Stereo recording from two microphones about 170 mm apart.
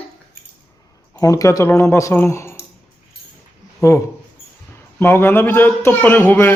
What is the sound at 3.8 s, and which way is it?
Speech, 15° left (ahead or behind).